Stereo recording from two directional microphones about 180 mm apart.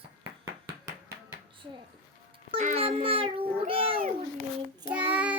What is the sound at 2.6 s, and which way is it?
Cat, 40° right (ahead or behind).